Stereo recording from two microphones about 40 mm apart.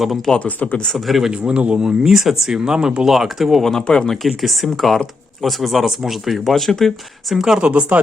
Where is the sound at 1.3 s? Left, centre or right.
Right.